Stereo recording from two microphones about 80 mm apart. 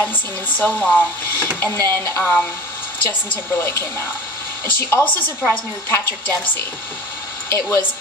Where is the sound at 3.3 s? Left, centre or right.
Left.